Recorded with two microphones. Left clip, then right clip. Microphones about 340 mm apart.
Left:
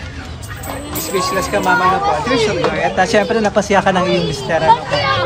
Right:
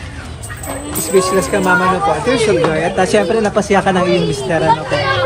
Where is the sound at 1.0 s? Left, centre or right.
Left.